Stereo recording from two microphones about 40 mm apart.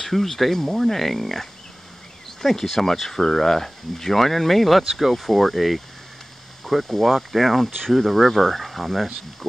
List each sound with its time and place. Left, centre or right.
0.0 s speech: centre